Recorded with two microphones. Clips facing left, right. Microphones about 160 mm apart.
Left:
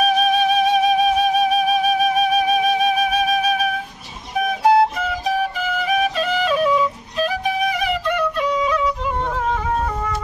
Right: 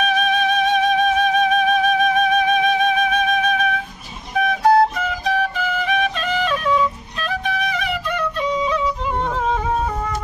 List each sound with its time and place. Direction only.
0.0 s music: 10° left (ahead or behind)
8.4 s music: 25° right (ahead or behind)